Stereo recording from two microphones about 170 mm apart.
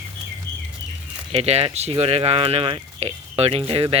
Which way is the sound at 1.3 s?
40° right (ahead or behind).